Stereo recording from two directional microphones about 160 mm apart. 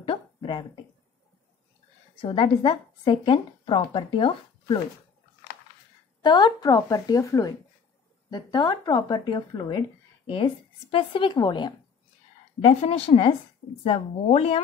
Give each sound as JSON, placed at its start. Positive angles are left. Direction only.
{"t": 0.0, "sound": "a sound", "side_deg": 30}
{"t": 2.2, "sound": "speech", "side_deg": 30}
{"t": 6.2, "sound": "speech", "side_deg": 25}
{"t": 12.6, "sound": "speech", "side_deg": 40}